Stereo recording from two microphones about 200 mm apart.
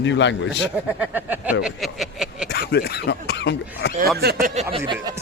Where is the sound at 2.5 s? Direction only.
50° left (ahead or behind).